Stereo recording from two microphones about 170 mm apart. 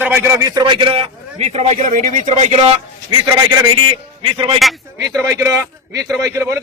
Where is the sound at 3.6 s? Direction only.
30° right (ahead or behind).